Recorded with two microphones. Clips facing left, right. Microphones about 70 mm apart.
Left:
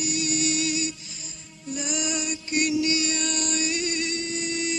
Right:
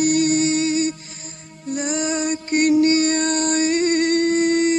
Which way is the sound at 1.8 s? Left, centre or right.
Right.